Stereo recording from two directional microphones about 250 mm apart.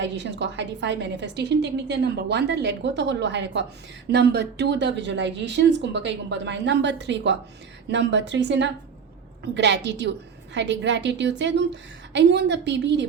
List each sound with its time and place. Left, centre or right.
0.0 s a woman's voice: right